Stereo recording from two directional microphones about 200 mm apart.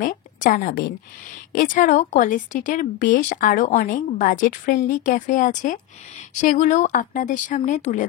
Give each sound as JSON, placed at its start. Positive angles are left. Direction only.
{"t": 0.0, "sound": "a woman's voice", "side_deg": 40}